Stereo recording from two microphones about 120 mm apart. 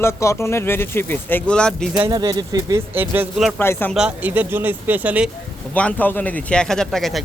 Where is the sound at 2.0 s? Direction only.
35° right (ahead or behind).